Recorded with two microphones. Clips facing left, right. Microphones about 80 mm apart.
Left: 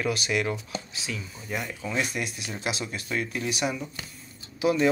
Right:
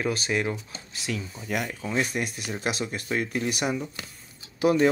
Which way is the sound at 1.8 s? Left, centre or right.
Right.